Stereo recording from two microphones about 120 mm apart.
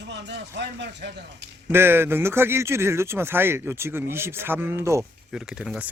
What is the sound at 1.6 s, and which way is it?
Speech, 20° right (ahead or behind).